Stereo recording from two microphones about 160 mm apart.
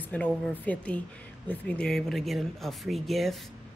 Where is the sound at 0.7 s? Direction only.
10° left (ahead or behind).